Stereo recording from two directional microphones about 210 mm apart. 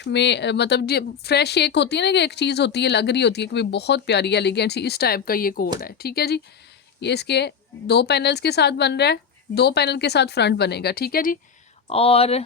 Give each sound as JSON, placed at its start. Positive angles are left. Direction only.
{"t": 0.0, "sound": "speech", "side_deg": 55}
{"t": 11.9, "sound": "speech", "side_deg": 30}